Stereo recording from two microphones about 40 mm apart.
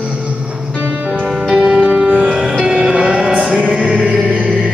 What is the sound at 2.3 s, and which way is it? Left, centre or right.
Music, right.